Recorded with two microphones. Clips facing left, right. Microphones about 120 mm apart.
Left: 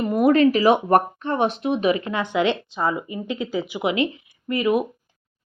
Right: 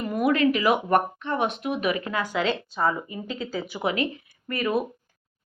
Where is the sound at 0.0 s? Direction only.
35° left (ahead or behind).